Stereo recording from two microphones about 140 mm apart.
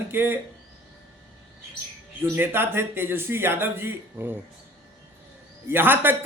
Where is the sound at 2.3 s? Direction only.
15° right (ahead or behind).